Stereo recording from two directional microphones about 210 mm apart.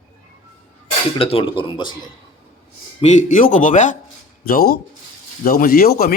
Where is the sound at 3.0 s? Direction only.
35° left (ahead or behind).